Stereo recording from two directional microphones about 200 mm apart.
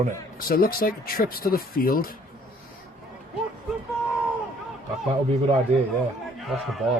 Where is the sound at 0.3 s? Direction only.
45° left (ahead or behind).